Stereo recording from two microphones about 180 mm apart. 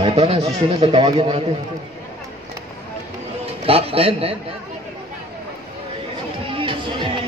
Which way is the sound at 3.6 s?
30° right (ahead or behind).